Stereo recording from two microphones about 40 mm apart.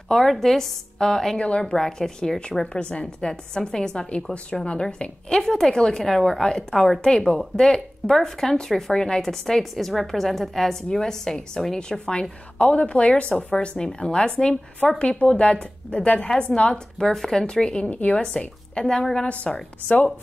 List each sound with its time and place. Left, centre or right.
0.3 s a woman's voice: centre
1.4 s a woman's voice: left
1.7 s a woman's voice: centre
4.1 s a woman's voice: left
9.2 s a woman's voice: centre
12.1 s a woman's voice: left
17.0 s a woman's voice: centre
17.4 s a woman's voice: left